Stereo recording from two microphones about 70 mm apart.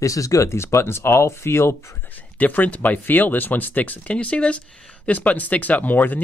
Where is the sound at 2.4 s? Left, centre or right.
Left.